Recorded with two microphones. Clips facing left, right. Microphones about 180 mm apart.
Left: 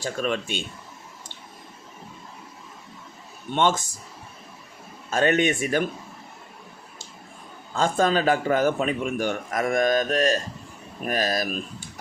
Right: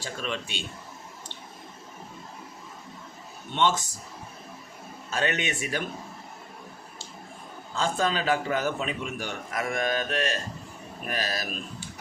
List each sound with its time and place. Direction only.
0.0 s a man's voice: 45° left (ahead or behind)
3.5 s a man's voice: 50° left (ahead or behind)
5.1 s a man's voice: 50° left (ahead or behind)
7.8 s a man's voice: 50° left (ahead or behind)